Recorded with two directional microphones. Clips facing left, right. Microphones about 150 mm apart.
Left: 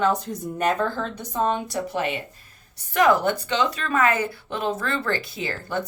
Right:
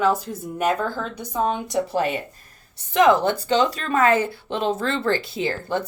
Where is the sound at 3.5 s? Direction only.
35° right (ahead or behind).